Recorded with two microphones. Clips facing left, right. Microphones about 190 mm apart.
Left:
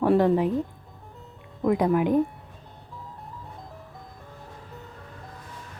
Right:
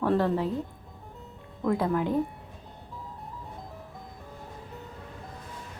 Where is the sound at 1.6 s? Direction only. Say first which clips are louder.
Left 4 dB; 15° left (ahead or behind).